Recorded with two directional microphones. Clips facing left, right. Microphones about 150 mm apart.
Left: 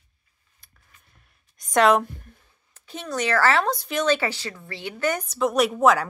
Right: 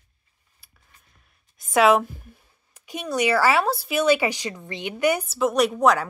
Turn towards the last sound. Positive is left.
turn(degrees=0)  # may be behind; listen again after turning